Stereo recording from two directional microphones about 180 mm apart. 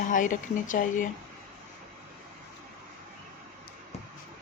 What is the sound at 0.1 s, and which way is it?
Speech, 45° left (ahead or behind).